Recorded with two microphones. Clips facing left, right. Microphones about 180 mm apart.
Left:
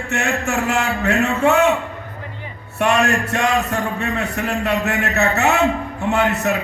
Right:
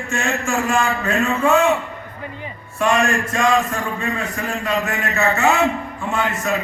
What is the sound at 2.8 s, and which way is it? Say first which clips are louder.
A man's voice: left 1 dB; 70° left (ahead or behind).